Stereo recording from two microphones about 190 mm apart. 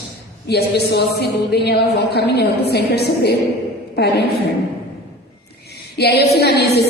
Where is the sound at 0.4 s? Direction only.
60° left (ahead or behind).